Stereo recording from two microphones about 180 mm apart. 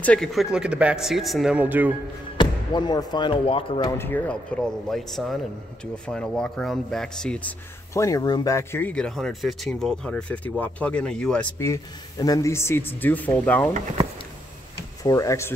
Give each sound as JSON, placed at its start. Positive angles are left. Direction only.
{"t": 0.0, "sound": "speech", "side_deg": 5}
{"t": 2.3, "sound": "speech", "side_deg": 25}
{"t": 4.0, "sound": "speech", "side_deg": 10}
{"t": 11.5, "sound": "speech", "side_deg": 15}
{"t": 15.0, "sound": "speech", "side_deg": 20}